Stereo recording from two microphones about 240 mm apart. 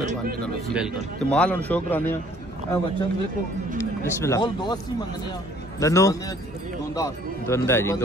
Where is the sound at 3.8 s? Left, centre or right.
Centre.